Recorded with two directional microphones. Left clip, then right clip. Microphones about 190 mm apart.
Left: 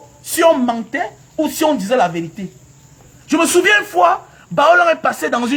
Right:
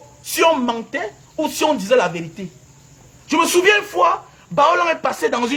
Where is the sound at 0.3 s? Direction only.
15° right (ahead or behind).